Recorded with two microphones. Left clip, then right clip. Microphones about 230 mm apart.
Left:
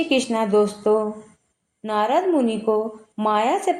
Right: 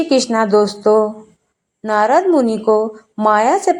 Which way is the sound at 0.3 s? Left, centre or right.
Right.